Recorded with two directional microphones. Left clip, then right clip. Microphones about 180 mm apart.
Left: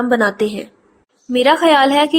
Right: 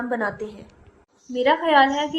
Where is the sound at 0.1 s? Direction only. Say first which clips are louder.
Left 12 dB; 35° left (ahead or behind).